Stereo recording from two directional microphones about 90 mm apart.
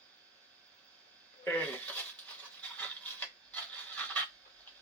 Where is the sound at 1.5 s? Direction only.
15° left (ahead or behind).